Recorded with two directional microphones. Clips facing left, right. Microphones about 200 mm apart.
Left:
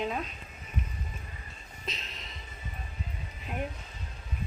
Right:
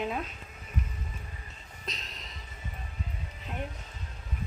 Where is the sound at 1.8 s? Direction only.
Centre (ahead or behind).